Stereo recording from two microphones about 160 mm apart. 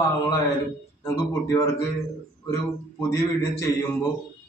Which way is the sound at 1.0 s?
20° left (ahead or behind).